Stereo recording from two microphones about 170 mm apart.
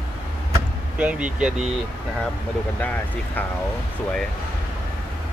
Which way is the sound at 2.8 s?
10° left (ahead or behind).